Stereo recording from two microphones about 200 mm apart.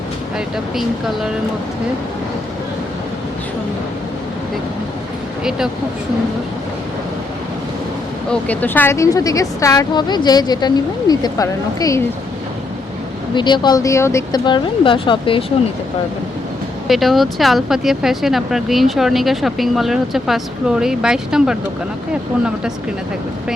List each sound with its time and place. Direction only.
0.3 s speech: centre (ahead or behind)
5.4 s speech: 5° right (ahead or behind)
8.3 s a woman's voice: 10° left (ahead or behind)
13.3 s speech: 20° left (ahead or behind)
16.9 s speech: centre (ahead or behind)